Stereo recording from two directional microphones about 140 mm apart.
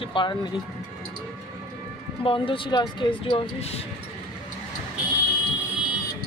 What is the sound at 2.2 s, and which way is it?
Speech, 40° left (ahead or behind).